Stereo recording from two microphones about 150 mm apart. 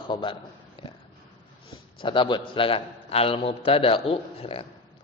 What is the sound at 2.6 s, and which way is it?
A man's voice, 35° left (ahead or behind).